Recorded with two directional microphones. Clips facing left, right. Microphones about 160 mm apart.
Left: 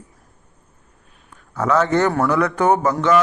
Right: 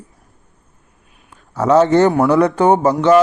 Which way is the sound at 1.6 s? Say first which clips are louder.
Right 6 dB; 25° right (ahead or behind).